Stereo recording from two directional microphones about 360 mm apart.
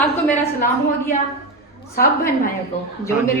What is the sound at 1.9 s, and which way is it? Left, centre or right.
Speech, left.